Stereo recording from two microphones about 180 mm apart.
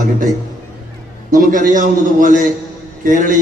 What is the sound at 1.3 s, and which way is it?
A man's voice, 45° right (ahead or behind).